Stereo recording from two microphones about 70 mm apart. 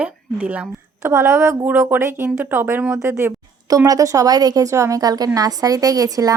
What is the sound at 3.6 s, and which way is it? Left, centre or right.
A woman's voice, right.